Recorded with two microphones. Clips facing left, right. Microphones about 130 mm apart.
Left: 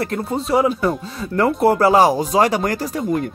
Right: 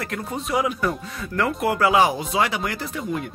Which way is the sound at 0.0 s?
30° left (ahead or behind).